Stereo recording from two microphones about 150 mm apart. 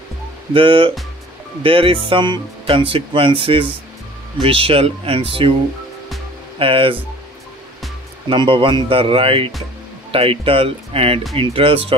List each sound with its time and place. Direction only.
0.5 s speech: 35° right (ahead or behind)
6.6 s speech: 35° right (ahead or behind)
8.3 s speech: 35° right (ahead or behind)